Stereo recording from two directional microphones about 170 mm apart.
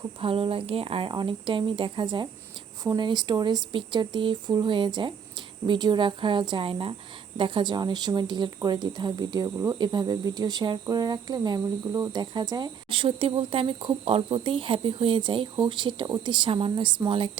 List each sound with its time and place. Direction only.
0.2 s speech: 35° right (ahead or behind)